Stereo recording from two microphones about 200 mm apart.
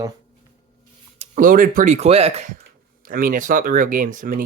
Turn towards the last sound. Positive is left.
turn(degrees=-40)  # may be behind; listen again after turning